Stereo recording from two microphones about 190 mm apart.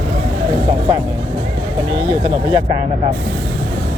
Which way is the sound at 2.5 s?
20° right (ahead or behind).